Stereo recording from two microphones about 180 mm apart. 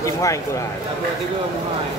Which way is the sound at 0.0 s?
15° left (ahead or behind).